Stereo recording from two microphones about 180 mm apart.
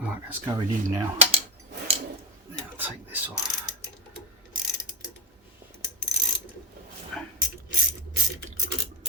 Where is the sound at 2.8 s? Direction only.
10° right (ahead or behind).